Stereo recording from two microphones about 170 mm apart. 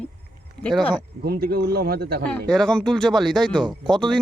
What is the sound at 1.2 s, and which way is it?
Speech, 70° right (ahead or behind).